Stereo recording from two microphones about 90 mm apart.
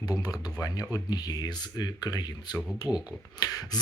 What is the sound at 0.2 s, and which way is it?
Speech, 40° left (ahead or behind).